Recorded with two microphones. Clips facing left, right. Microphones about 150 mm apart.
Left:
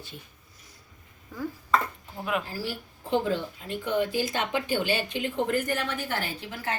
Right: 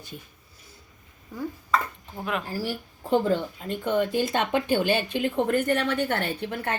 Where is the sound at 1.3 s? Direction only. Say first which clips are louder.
Right 1 dB; 15° right (ahead or behind).